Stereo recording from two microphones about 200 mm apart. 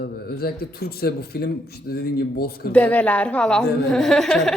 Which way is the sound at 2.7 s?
5° left (ahead or behind).